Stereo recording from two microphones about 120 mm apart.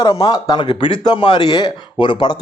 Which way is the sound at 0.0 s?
45° left (ahead or behind).